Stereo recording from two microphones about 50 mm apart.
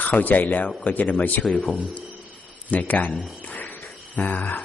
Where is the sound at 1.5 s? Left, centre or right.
Left.